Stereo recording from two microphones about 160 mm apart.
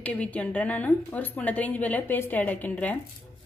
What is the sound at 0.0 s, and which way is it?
A woman's voice, 10° left (ahead or behind).